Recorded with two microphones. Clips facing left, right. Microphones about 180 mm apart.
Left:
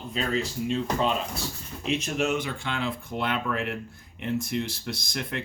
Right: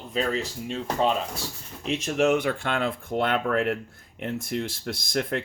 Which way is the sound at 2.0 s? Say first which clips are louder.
Right 9 dB; 55° right (ahead or behind).